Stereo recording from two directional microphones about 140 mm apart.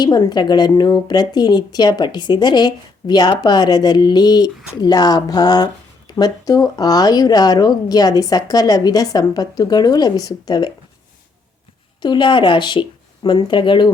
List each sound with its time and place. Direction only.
0.0 s a woman's voice: 30° left (ahead or behind)
12.0 s a woman's voice: 35° left (ahead or behind)